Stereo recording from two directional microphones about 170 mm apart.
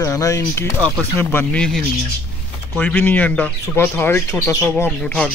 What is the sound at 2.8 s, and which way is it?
Speech, 10° left (ahead or behind).